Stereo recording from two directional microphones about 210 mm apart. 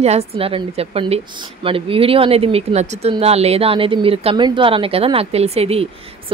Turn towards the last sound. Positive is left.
turn(degrees=-30)  # may be behind; listen again after turning